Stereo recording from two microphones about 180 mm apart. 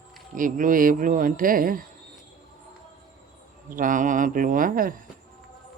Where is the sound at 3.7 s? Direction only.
50° right (ahead or behind).